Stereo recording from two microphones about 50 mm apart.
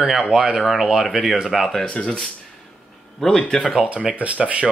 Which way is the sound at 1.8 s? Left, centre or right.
Centre.